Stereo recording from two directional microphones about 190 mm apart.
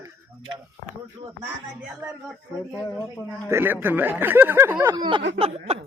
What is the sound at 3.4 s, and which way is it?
Speech, 10° right (ahead or behind).